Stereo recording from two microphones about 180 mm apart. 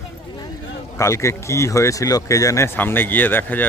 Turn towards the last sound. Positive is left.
turn(degrees=10)  # may be behind; listen again after turning